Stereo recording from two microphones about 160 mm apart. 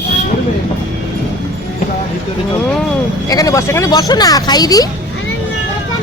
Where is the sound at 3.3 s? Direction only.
20° left (ahead or behind).